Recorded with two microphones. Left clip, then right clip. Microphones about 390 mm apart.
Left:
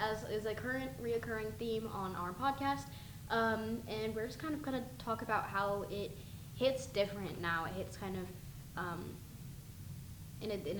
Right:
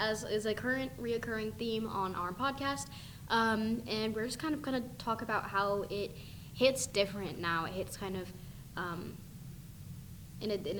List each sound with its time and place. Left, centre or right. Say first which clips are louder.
0.0 s a woman's voice: right 4 dB; right
10.4 s a woman's voice: right 4 dB; right